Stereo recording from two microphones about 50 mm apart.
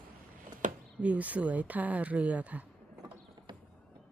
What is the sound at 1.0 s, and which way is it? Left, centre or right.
Speech, right.